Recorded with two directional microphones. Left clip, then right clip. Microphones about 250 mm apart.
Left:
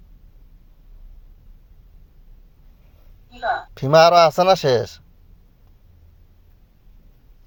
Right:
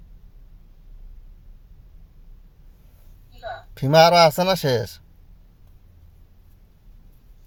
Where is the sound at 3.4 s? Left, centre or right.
Left.